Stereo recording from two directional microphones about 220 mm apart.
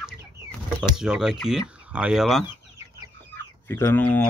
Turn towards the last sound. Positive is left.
turn(degrees=10)  # may be behind; listen again after turning